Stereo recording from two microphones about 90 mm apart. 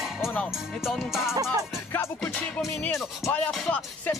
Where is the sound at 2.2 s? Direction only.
15° left (ahead or behind).